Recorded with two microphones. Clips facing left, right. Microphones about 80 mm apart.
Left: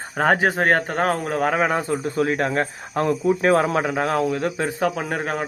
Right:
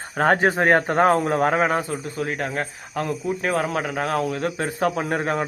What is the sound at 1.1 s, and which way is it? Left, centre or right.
Speech, centre.